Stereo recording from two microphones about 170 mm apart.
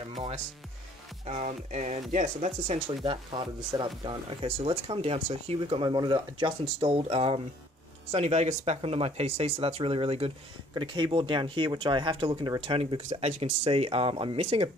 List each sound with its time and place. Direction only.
1.2 s speech: 45° right (ahead or behind)
3.1 s speech: 30° right (ahead or behind)